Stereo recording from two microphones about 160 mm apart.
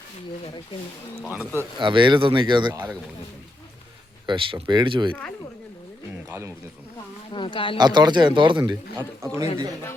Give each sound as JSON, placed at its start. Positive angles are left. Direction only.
{"t": 1.3, "sound": "speech", "side_deg": -10}
{"t": 1.8, "sound": "speech", "side_deg": -30}
{"t": 4.3, "sound": "speech", "side_deg": -30}
{"t": 7.3, "sound": "speech", "side_deg": 30}
{"t": 7.8, "sound": "speech", "side_deg": -25}
{"t": 8.7, "sound": "speech", "side_deg": -15}